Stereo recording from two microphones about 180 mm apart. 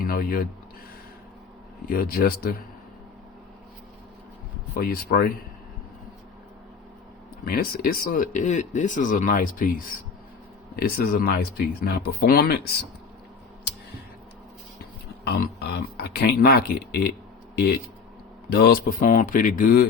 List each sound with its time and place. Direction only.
0.0 s speech: 55° left (ahead or behind)
1.9 s speech: 55° left (ahead or behind)
4.7 s speech: 60° left (ahead or behind)
7.4 s speech: 55° left (ahead or behind)
15.2 s speech: 60° left (ahead or behind)
18.5 s speech: 60° left (ahead or behind)